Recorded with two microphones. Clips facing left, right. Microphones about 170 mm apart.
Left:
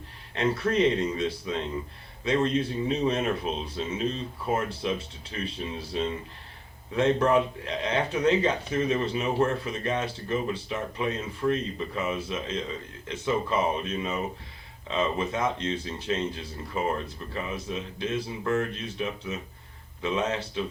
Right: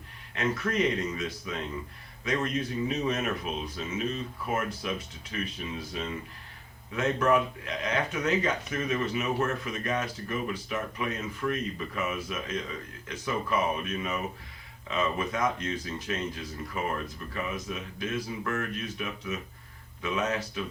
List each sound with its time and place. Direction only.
0.3 s a man's voice: 30° left (ahead or behind)